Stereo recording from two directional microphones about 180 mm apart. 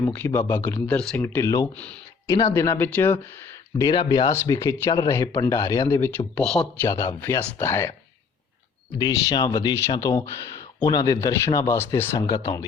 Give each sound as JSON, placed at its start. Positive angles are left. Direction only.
{"t": 0.1, "sound": "speech", "side_deg": 10}
{"t": 3.8, "sound": "speech", "side_deg": 20}
{"t": 6.8, "sound": "speech", "side_deg": 15}
{"t": 9.0, "sound": "speech", "side_deg": 20}